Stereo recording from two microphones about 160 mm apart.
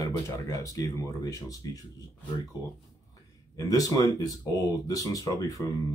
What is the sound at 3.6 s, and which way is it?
Speech, 20° left (ahead or behind).